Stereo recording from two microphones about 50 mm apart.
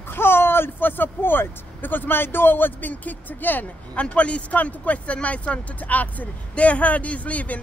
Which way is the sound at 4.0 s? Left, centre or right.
Left.